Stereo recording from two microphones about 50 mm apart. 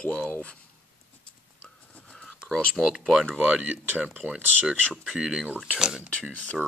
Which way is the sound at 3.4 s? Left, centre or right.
Right.